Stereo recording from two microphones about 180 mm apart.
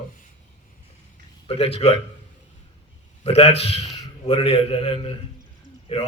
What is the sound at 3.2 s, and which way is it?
A man's voice, 35° left (ahead or behind).